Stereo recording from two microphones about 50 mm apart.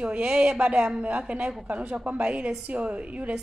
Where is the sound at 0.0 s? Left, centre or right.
Right.